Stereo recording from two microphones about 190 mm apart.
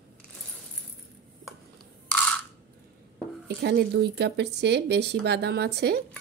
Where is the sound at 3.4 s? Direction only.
60° right (ahead or behind).